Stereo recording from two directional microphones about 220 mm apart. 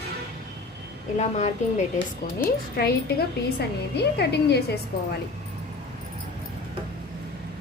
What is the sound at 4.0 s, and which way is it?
Speech, 50° left (ahead or behind).